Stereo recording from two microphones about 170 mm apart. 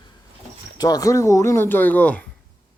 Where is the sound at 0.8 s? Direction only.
20° left (ahead or behind).